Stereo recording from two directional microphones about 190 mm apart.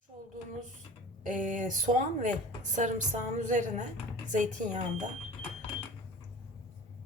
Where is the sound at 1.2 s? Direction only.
40° right (ahead or behind).